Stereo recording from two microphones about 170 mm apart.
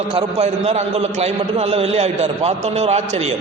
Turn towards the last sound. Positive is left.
turn(degrees=-40)  # may be behind; listen again after turning